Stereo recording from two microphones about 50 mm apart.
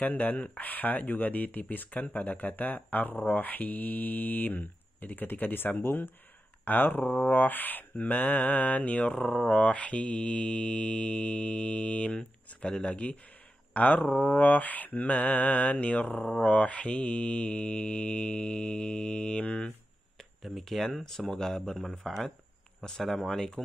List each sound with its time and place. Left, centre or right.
0.0 s speech: left
7.1 s mantra: left
7.3 s mantra: left
16.2 s speech: centre
16.4 s mantra: left
20.2 s speech: centre